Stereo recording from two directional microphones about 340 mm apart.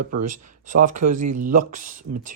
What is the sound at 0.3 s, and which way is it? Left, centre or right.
Speech, right.